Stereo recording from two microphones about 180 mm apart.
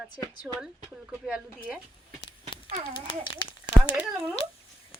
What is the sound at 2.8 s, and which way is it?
Speech, 30° left (ahead or behind).